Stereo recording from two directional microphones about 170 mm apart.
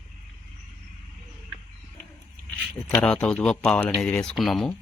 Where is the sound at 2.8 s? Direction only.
5° left (ahead or behind).